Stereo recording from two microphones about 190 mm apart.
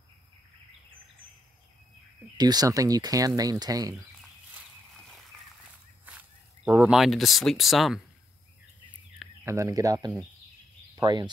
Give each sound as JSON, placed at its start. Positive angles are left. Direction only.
{"t": 2.3, "sound": "speech", "side_deg": -20}
{"t": 6.0, "sound": "speech", "side_deg": -10}
{"t": 9.4, "sound": "speech", "side_deg": -15}